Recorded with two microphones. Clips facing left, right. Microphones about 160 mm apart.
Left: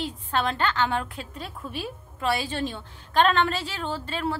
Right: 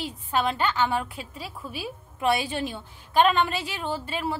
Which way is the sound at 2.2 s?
15° right (ahead or behind).